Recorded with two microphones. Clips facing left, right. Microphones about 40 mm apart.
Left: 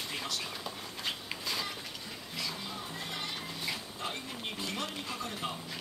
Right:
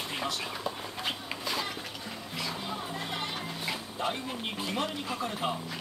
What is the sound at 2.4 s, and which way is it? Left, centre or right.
Music, centre.